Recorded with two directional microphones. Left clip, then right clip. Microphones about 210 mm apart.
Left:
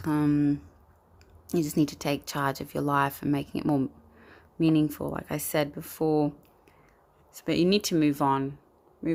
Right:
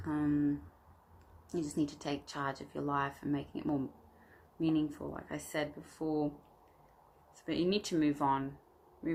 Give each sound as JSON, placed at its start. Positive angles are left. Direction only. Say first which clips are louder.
{"t": 0.0, "sound": "speech", "louder": "left 8 dB", "side_deg": 55}
{"t": 7.4, "sound": "speech", "louder": "left 9 dB", "side_deg": 50}